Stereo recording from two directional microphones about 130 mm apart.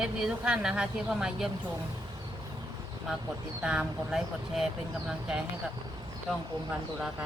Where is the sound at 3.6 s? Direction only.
5° right (ahead or behind).